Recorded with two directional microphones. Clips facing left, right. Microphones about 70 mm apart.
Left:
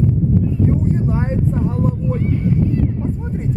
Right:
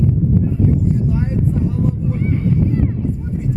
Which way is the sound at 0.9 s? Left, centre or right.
Left.